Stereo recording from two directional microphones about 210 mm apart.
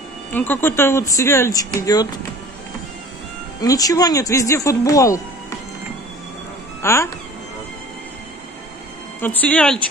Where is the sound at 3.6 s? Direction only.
15° left (ahead or behind).